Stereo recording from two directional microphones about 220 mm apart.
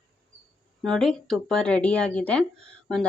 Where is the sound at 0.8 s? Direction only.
Centre (ahead or behind).